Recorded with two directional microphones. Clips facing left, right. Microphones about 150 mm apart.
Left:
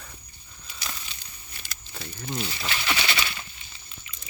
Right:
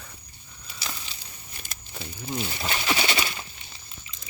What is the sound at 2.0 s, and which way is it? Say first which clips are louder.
Speech: right 1 dB; 5° right (ahead or behind).